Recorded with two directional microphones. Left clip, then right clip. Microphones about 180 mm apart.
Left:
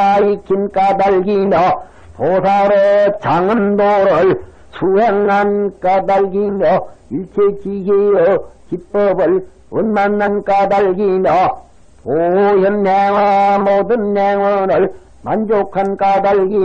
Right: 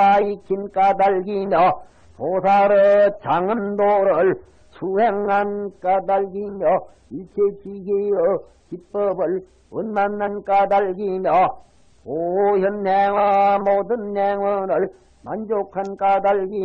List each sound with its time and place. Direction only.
0.0 s speech: 40° left (ahead or behind)
8.0 s speech: 40° left (ahead or behind)